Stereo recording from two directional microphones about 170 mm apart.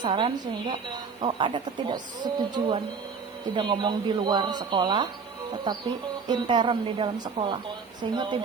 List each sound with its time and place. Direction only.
0.0 s a woman's voice: 30° right (ahead or behind)
6.2 s a woman's voice: 25° right (ahead or behind)